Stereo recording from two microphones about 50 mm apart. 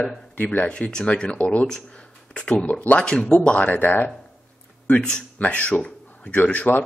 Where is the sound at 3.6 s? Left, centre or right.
Left.